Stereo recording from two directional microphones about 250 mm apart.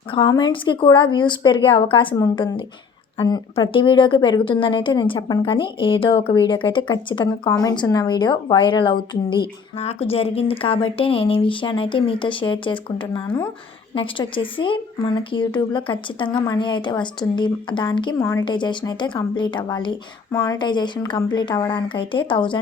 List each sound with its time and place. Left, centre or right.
0.1 s a woman's voice: centre